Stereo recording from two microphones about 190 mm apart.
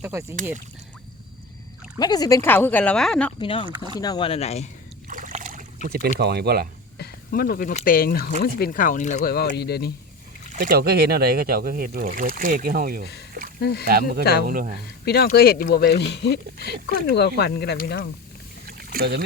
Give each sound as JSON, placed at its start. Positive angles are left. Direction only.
{"t": 0.0, "sound": "speech", "side_deg": -15}
{"t": 2.0, "sound": "speech", "side_deg": 20}
{"t": 3.4, "sound": "speech", "side_deg": 25}
{"t": 3.7, "sound": "speech", "side_deg": -25}
{"t": 4.0, "sound": "speech", "side_deg": 25}
{"t": 5.0, "sound": "a sound", "side_deg": -45}
{"t": 7.0, "sound": "a sound", "side_deg": 50}
{"t": 7.9, "sound": "speech", "side_deg": 50}
{"t": 10.6, "sound": "speech", "side_deg": -55}
{"t": 13.6, "sound": "speech", "side_deg": 60}
{"t": 13.8, "sound": "speech", "side_deg": -50}
{"t": 15.0, "sound": "speech", "side_deg": 55}
{"t": 18.9, "sound": "speech", "side_deg": -55}